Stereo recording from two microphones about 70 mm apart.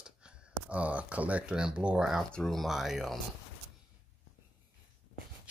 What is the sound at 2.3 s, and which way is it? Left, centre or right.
Speech, centre.